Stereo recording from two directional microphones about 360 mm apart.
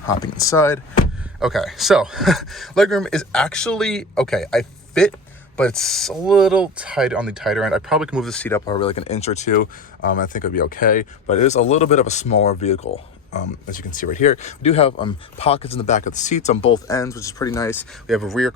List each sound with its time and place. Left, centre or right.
0.0 s speech: centre